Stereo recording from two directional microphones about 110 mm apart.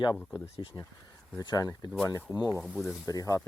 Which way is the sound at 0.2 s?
20° left (ahead or behind).